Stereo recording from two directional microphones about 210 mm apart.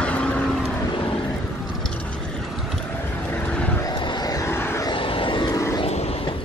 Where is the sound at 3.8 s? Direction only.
20° left (ahead or behind).